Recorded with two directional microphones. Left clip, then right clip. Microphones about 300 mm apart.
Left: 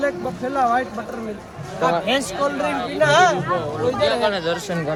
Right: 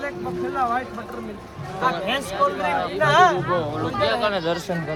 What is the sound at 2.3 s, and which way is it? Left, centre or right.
Speech, right.